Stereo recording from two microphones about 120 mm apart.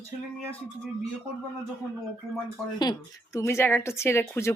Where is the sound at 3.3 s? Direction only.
20° left (ahead or behind).